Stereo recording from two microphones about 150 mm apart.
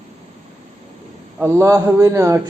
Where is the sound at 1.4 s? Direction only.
15° right (ahead or behind).